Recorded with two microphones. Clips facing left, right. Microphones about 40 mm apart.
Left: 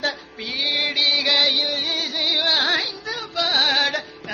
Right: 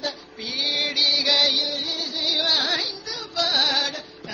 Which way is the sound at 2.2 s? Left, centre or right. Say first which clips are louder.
Left 2 dB; left.